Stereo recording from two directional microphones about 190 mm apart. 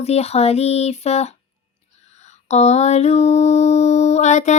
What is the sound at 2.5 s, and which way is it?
Music, 35° left (ahead or behind).